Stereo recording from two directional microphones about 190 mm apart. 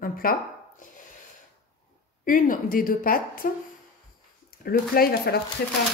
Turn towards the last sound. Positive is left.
turn(degrees=55)  # may be behind; listen again after turning